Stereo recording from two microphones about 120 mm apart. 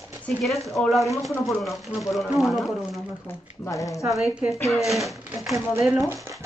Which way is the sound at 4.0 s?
Centre (ahead or behind).